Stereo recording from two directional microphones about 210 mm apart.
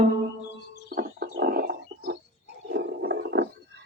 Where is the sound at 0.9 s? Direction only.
45° right (ahead or behind).